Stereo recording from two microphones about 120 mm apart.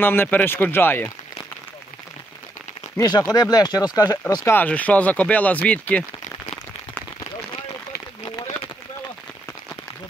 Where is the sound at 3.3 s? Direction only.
35° left (ahead or behind).